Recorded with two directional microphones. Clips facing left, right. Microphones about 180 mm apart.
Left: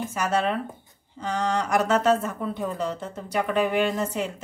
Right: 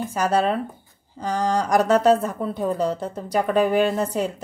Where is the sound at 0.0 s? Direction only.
35° right (ahead or behind).